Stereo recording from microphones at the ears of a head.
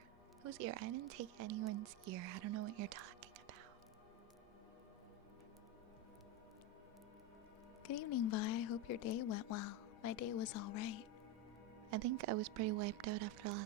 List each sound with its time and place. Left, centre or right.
0.4 s a woman's voice: right
7.9 s a woman's voice: left
11.9 s a woman's voice: right